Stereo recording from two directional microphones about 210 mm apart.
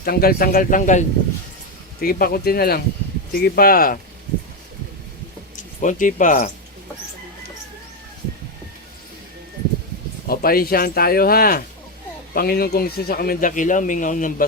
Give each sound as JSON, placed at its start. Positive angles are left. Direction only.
{"t": 0.0, "sound": "speech", "side_deg": 45}
{"t": 5.8, "sound": "speech", "side_deg": 40}
{"t": 10.2, "sound": "speech", "side_deg": 45}